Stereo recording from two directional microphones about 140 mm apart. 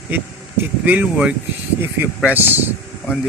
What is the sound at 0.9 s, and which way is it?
Speech, 10° right (ahead or behind).